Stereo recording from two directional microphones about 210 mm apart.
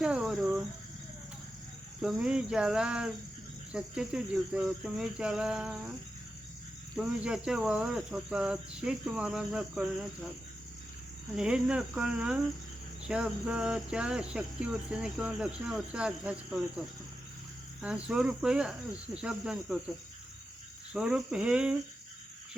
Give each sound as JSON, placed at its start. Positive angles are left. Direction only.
{"t": 0.0, "sound": "cricket", "side_deg": -5}
{"t": 2.0, "sound": "cricket", "side_deg": -5}
{"t": 6.9, "sound": "cricket", "side_deg": -5}
{"t": 11.3, "sound": "cricket", "side_deg": -5}
{"t": 20.9, "sound": "cricket", "side_deg": -5}